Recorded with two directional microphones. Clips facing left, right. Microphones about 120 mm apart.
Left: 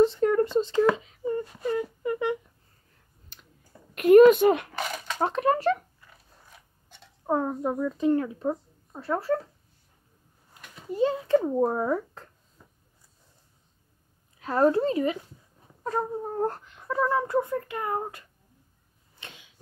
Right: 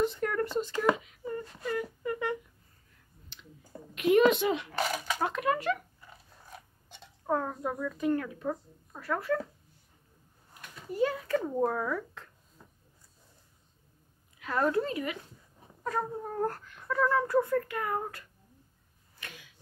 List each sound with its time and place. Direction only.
0.0 s a sound: 25° left (ahead or behind)
0.9 s wail: 25° left (ahead or behind)
3.3 s clicking: 45° left (ahead or behind)
3.9 s a sound: 50° left (ahead or behind)
4.7 s a sound: 5° right (ahead or behind)
5.2 s a child's voice: 35° left (ahead or behind)
7.2 s a woman's voice: 20° left (ahead or behind)
10.9 s a child's voice: 25° left (ahead or behind)
14.4 s a child's voice: 35° left (ahead or behind)
15.8 s cat: 30° left (ahead or behind)
19.1 s arrow: 25° left (ahead or behind)